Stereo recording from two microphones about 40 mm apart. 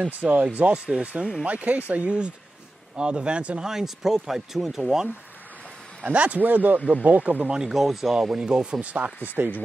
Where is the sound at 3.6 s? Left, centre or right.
Centre.